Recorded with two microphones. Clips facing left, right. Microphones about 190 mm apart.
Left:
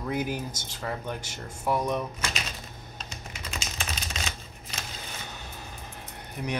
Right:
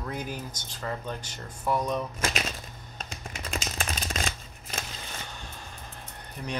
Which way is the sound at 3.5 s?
45° right (ahead or behind).